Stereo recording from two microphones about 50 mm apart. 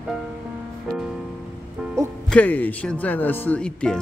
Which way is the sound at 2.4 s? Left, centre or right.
Left.